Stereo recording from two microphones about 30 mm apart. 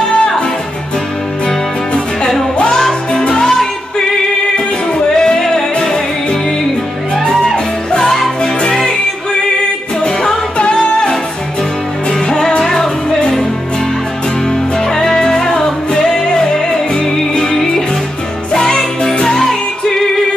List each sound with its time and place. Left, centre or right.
2.9 s music: left
4.6 s music: left
7.5 s music: left
10.6 s music: left
12.6 s music: centre
14.5 s music: centre
19.3 s music: centre